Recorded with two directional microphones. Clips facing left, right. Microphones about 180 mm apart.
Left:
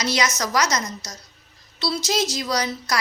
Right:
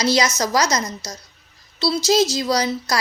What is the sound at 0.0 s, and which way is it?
A woman's voice, 30° right (ahead or behind).